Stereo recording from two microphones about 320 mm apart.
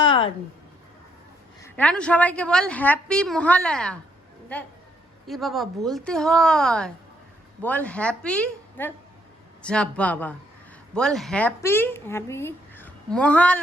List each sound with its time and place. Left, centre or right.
0.0 s a sound: centre
1.6 s a woman's voice: centre
5.2 s a woman's voice: centre